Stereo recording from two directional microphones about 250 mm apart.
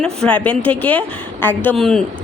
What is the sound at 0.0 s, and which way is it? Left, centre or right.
A man's voice, centre.